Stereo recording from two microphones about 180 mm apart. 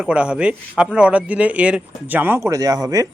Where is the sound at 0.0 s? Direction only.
5° right (ahead or behind).